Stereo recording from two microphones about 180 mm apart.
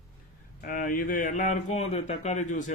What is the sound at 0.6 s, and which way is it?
Speech, 50° left (ahead or behind).